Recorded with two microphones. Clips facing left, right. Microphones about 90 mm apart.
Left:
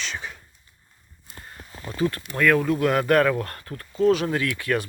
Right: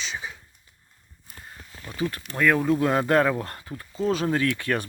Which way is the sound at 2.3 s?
15° right (ahead or behind).